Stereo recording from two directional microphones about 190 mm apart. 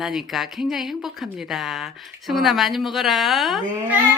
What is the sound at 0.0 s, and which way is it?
A woman's voice, centre (ahead or behind).